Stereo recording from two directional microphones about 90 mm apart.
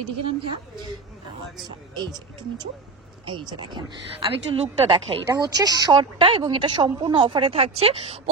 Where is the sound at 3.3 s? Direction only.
60° right (ahead or behind).